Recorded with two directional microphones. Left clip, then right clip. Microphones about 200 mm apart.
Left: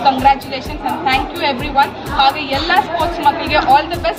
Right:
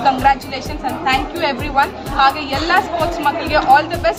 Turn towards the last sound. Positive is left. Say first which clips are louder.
# even
turn(degrees=0)  # may be behind; listen again after turning